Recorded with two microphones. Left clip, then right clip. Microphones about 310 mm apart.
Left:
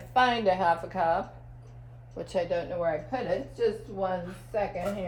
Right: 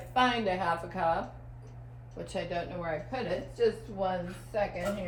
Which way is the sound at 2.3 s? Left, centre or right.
Left.